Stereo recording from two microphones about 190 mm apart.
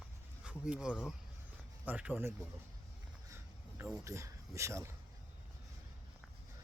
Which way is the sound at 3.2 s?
15° right (ahead or behind).